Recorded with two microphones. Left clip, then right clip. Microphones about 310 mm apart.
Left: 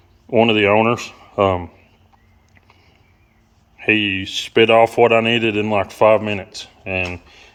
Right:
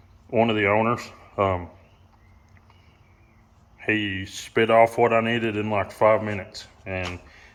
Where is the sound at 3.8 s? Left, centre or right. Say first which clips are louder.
Left 8 dB; left.